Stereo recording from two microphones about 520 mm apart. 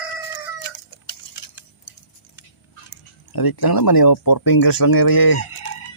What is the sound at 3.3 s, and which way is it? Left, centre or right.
Speech, left.